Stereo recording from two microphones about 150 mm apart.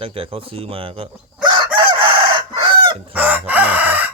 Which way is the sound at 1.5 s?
35° right (ahead or behind).